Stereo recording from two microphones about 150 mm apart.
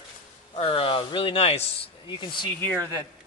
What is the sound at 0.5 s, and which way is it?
Speech, 40° left (ahead or behind).